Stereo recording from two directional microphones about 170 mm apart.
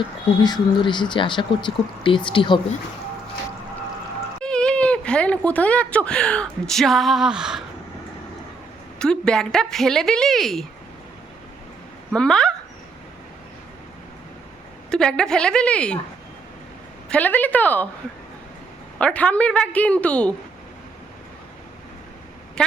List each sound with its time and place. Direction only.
0.4 s speech: 25° left (ahead or behind)
4.4 s speech: 5° left (ahead or behind)
9.0 s a woman's voice: 5° left (ahead or behind)
12.1 s a woman's voice: 5° left (ahead or behind)
14.8 s a woman's voice: 5° left (ahead or behind)
17.1 s a woman's voice: 10° left (ahead or behind)
18.9 s a woman's voice: 5° left (ahead or behind)
22.6 s a woman's voice: 5° left (ahead or behind)